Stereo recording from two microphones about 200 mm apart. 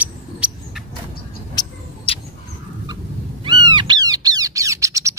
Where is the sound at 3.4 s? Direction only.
25° right (ahead or behind).